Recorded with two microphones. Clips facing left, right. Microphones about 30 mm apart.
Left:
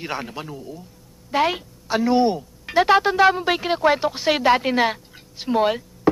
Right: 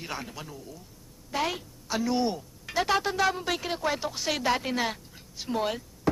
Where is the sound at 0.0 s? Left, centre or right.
Left.